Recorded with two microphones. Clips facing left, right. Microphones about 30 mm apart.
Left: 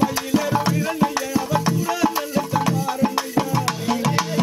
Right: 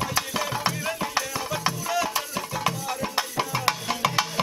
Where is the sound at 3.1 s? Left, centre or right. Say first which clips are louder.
Left 5 dB; centre.